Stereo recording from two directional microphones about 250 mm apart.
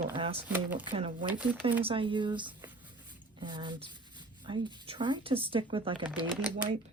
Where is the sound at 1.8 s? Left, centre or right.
Right.